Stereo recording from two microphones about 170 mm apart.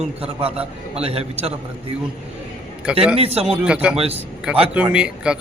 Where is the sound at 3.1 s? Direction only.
35° right (ahead or behind).